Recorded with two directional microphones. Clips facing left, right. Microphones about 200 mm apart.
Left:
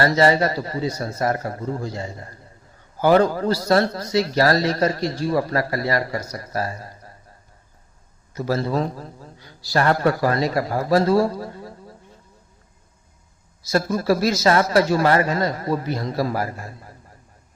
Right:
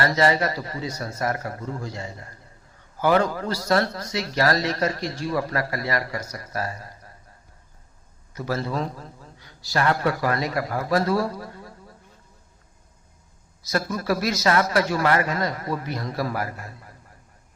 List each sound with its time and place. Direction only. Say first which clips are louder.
0.0 s a man's voice: left 4 dB; 30° left (ahead or behind)
8.4 s a man's voice: left 5 dB; 30° left (ahead or behind)
13.7 s a man's voice: left 5 dB; 30° left (ahead or behind)